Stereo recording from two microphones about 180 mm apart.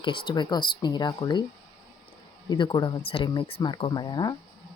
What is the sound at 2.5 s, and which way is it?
Speech, 25° left (ahead or behind).